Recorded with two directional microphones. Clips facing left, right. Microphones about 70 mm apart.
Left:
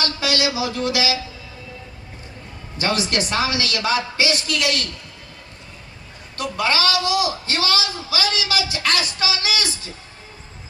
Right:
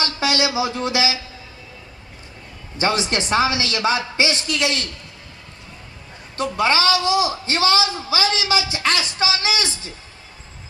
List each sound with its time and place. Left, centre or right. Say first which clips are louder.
0.0 s a man's voice: right 1 dB; right
2.8 s a man's voice: right 1 dB; right
6.3 s a man's voice: right 3 dB; right